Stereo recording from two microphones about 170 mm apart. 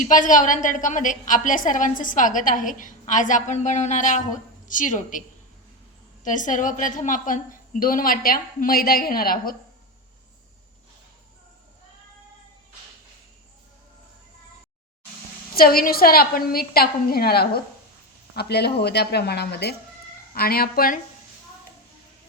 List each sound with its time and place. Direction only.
0.0 s a woman's voice: 50° left (ahead or behind)
6.2 s a woman's voice: 50° left (ahead or behind)
15.5 s a woman's voice: 60° left (ahead or behind)
20.3 s a woman's voice: 65° left (ahead or behind)